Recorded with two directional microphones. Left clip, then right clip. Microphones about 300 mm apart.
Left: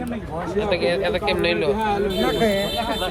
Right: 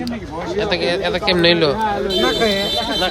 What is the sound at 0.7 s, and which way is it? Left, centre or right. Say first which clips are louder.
Speech: right 1 dB; centre.